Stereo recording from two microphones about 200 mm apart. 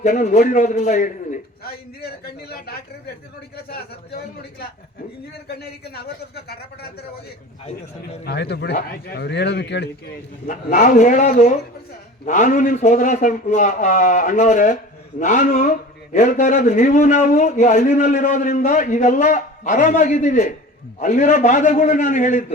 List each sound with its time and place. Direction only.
0.0 s a man's voice: 35° left (ahead or behind)
5.5 s speech: 50° left (ahead or behind)
8.2 s speech: 55° left (ahead or behind)
10.4 s a man's voice: 40° left (ahead or behind)